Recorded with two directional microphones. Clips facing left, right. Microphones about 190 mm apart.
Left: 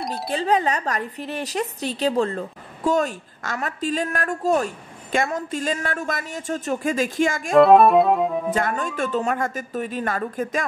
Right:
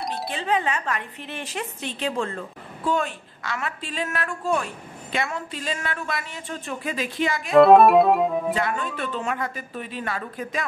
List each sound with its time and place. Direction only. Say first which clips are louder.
0.3 s speech: left 5 dB; 40° left (ahead or behind)
7.5 s music: even; centre (ahead or behind)
8.5 s speech: left 3 dB; 45° left (ahead or behind)